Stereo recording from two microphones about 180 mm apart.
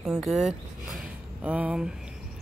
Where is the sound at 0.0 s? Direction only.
Centre (ahead or behind).